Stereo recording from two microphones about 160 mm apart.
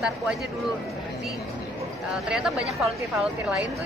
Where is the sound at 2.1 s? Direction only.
5° right (ahead or behind).